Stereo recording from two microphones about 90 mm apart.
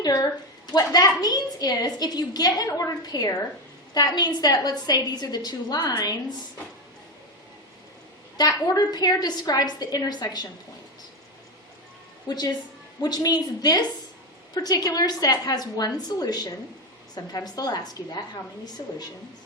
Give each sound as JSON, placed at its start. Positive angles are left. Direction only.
{"t": 0.0, "sound": "a sound", "side_deg": 45}
{"t": 0.7, "sound": "a woman's voice", "side_deg": 45}
{"t": 8.4, "sound": "a woman's voice", "side_deg": 45}
{"t": 12.3, "sound": "a woman's voice", "side_deg": 50}